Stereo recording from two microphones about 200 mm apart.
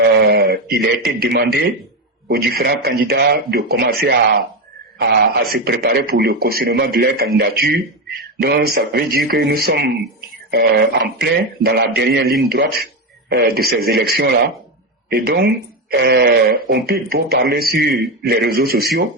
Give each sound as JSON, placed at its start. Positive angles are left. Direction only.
{"t": 0.3, "sound": "a man's voice", "side_deg": -50}